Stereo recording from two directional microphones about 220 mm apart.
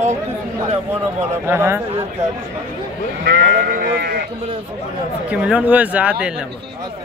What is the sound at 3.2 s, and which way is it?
Sheep, 45° right (ahead or behind).